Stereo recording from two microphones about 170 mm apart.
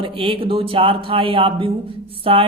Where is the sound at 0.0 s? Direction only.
30° right (ahead or behind).